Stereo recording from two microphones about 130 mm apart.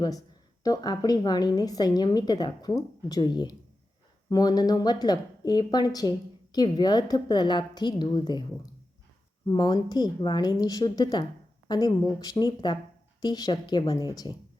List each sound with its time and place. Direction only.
0.6 s speech: 30° left (ahead or behind)